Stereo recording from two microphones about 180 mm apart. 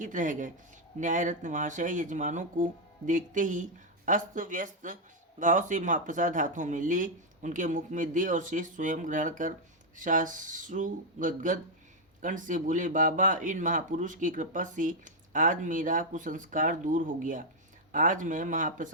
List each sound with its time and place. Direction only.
0.0 s speech: 45° right (ahead or behind)